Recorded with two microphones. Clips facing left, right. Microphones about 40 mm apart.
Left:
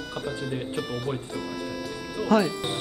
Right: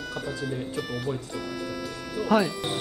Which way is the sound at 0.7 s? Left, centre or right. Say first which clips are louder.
Even; centre.